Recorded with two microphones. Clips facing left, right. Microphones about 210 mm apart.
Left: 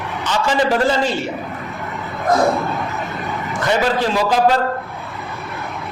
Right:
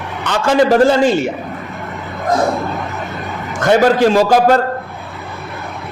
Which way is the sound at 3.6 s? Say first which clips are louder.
Right 7 dB; 50° right (ahead or behind).